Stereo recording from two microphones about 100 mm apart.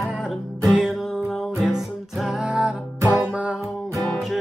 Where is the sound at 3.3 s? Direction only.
10° right (ahead or behind).